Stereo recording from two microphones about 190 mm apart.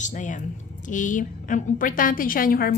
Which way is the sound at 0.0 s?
40° left (ahead or behind).